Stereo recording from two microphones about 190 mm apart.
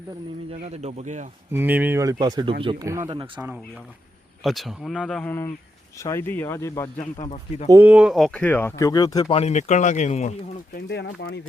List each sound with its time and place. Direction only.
0.6 s speech: 35° right (ahead or behind)
1.5 s speech: 10° right (ahead or behind); by 2.8 s 25° right (ahead or behind)
2.8 s speech: 15° right (ahead or behind)
4.4 s speech: centre (ahead or behind)
7.0 s speech: 35° left (ahead or behind)
7.7 s speech: 10° right (ahead or behind); by 9.2 s 20° left (ahead or behind)
9.3 s speech: 35° left (ahead or behind)
10.8 s speech: 60° left (ahead or behind)